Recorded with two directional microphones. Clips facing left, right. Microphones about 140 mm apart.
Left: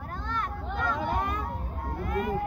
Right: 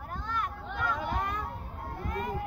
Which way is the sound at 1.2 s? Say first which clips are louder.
Left 3 dB; 10° left (ahead or behind).